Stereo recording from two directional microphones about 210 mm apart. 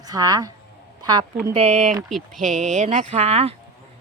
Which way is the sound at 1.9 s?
Centre (ahead or behind).